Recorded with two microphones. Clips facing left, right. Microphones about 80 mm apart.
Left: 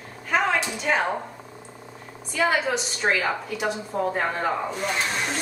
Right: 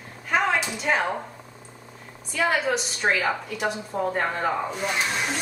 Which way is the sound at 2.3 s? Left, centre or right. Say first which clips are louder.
Left 1 dB; centre.